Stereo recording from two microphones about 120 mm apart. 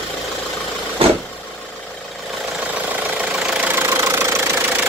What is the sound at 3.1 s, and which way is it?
Engine, 5° right (ahead or behind).